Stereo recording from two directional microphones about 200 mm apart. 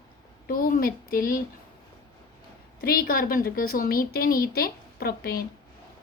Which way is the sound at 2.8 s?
45° left (ahead or behind).